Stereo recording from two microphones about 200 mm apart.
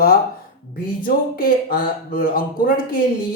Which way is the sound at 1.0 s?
45° left (ahead or behind).